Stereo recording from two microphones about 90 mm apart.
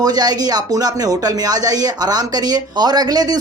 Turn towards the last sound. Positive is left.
turn(degrees=-45)  # may be behind; listen again after turning